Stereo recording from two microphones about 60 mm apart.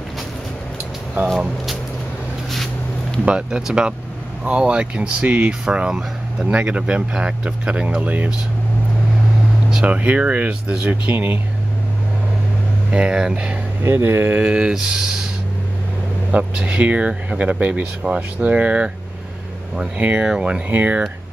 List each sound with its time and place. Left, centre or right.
3.3 s speech: centre
9.8 s speech: right
12.9 s speech: centre
13.8 s speech: right
14.4 s speech: centre
16.3 s speech: right
20.0 s speech: right
20.7 s speech: right